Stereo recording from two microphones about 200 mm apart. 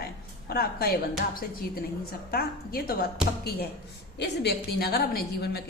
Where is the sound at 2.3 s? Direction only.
50° left (ahead or behind).